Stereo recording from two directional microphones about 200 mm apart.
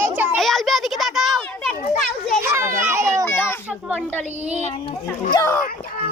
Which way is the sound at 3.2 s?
10° left (ahead or behind).